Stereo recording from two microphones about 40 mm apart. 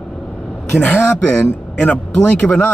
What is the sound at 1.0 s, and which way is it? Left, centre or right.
A man's voice, left.